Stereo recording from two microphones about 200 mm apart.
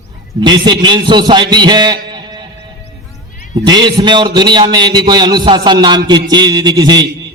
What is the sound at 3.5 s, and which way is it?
A man's voice, 20° right (ahead or behind).